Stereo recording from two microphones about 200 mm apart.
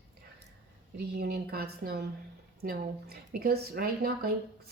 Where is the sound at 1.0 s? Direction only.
55° right (ahead or behind).